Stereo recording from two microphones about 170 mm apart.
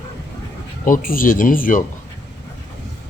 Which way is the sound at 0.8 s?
55° left (ahead or behind).